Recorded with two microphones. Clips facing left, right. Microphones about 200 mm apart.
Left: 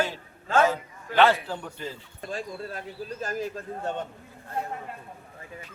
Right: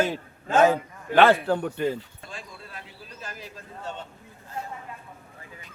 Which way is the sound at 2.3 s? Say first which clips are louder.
Left 9 dB; 45° left (ahead or behind).